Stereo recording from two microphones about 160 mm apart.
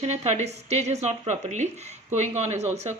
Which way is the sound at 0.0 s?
45° right (ahead or behind).